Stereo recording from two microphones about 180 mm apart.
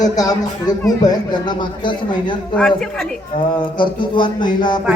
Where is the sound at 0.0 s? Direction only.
20° left (ahead or behind).